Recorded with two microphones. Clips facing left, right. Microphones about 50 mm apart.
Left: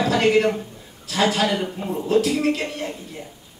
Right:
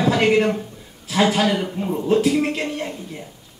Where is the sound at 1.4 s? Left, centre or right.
Centre.